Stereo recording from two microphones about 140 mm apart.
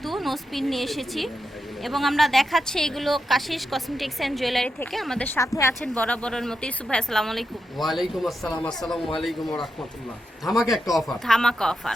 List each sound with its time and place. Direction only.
0.0 s a woman's voice: centre (ahead or behind)
5.4 s a woman's voice: 20° left (ahead or behind)
6.0 s a woman's voice: 10° left (ahead or behind)